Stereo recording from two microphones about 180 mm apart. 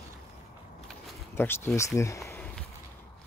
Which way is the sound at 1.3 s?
10° left (ahead or behind).